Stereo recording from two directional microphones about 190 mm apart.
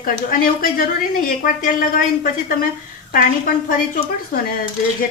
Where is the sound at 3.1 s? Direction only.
45° left (ahead or behind).